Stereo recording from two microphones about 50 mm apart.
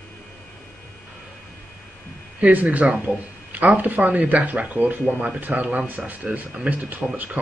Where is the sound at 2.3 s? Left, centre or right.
Right.